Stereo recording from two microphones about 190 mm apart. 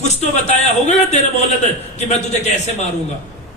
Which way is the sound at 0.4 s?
35° left (ahead or behind).